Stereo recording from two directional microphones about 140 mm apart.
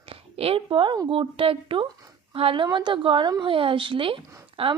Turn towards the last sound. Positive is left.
turn(degrees=-40)  # may be behind; listen again after turning